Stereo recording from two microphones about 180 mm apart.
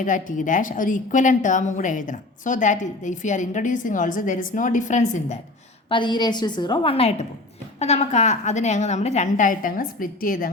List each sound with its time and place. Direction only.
0.0 s a woman's voice: 45° left (ahead or behind)
5.9 s a woman's voice: 25° left (ahead or behind); by 10.5 s 55° left (ahead or behind)